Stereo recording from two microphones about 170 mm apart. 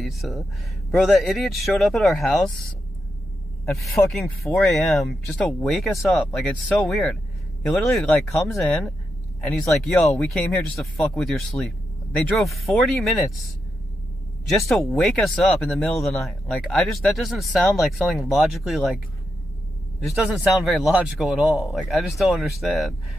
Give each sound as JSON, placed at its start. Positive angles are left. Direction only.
{"t": 0.0, "sound": "speech", "side_deg": 0}
{"t": 3.6, "sound": "speech", "side_deg": 15}
{"t": 3.9, "sound": "speech", "side_deg": 0}
{"t": 14.5, "sound": "speech", "side_deg": 0}
{"t": 20.0, "sound": "speech", "side_deg": -5}